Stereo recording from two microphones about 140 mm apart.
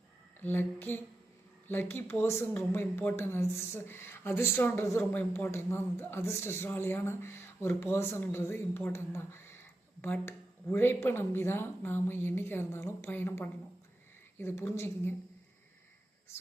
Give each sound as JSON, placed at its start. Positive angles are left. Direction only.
{"t": 0.3, "sound": "speech", "side_deg": 15}
{"t": 16.3, "sound": "speech", "side_deg": 20}